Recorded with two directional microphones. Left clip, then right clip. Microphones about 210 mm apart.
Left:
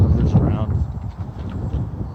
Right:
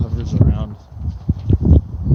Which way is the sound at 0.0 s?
40° right (ahead or behind).